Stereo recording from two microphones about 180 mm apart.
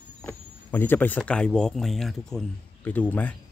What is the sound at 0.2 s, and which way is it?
Speech, 10° left (ahead or behind).